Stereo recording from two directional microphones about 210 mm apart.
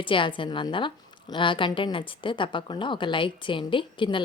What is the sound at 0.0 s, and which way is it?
A woman's voice, 25° left (ahead or behind).